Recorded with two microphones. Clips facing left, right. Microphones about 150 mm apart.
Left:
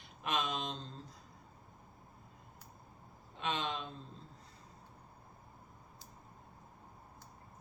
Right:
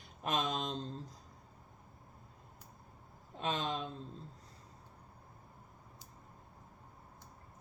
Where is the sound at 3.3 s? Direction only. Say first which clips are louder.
Right 1 dB; 40° right (ahead or behind).